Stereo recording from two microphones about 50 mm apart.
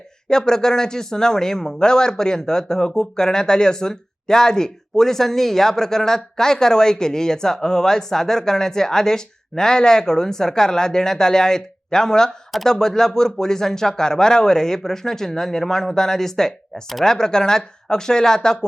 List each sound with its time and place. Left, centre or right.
0.3 s speech: centre